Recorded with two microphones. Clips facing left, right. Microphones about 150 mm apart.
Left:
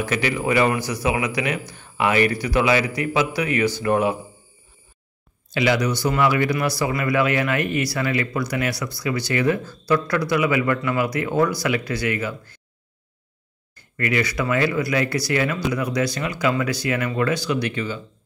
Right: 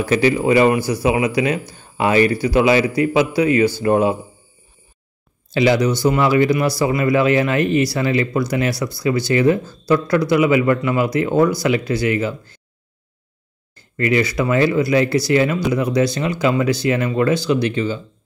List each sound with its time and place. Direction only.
0.0 s speech: 30° right (ahead or behind)
5.5 s speech: 30° right (ahead or behind)
13.7 s speech: 25° right (ahead or behind)